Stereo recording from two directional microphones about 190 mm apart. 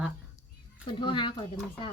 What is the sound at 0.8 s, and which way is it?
Speech, 25° left (ahead or behind).